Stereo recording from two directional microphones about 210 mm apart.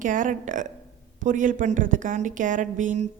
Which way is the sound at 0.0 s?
40° right (ahead or behind).